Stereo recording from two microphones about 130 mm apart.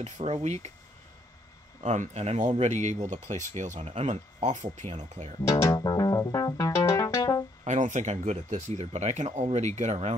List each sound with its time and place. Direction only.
0.0 s speech: 60° right (ahead or behind)
1.8 s speech: 65° right (ahead or behind)
3.8 s speech: 55° right (ahead or behind)
5.5 s music: 20° left (ahead or behind)
7.6 s speech: 65° right (ahead or behind)